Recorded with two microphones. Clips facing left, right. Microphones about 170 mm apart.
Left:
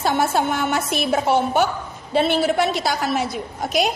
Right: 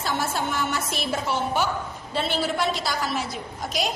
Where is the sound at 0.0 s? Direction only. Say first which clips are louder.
Left 7 dB; 60° left (ahead or behind).